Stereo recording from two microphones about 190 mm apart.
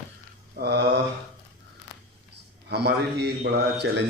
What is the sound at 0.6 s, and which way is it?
Speech, 60° right (ahead or behind).